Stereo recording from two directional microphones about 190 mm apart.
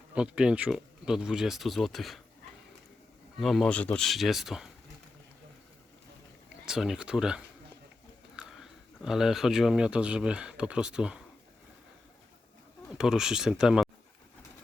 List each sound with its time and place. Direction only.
0.1 s speech: 5° right (ahead or behind)
3.3 s speech: centre (ahead or behind)
6.7 s speech: 5° right (ahead or behind)
12.9 s speech: 5° right (ahead or behind)